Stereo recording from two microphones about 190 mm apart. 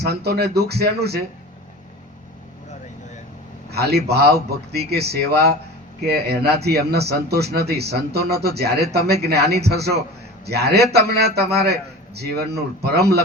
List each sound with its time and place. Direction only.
0.0 s speech: 60° right (ahead or behind)
3.7 s a man's voice: 60° right (ahead or behind)